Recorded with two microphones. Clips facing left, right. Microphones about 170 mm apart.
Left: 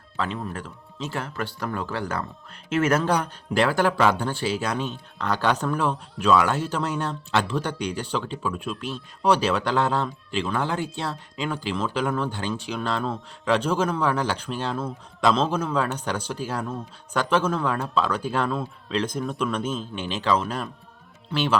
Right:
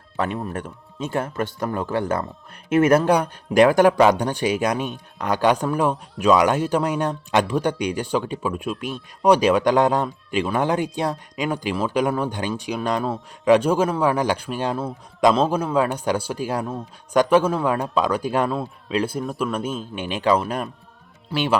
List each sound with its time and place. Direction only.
1.0 s speech: 50° right (ahead or behind)
1.9 s speech: 20° right (ahead or behind)